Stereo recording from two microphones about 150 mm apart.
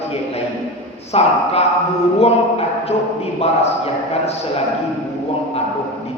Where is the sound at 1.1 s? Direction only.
40° left (ahead or behind).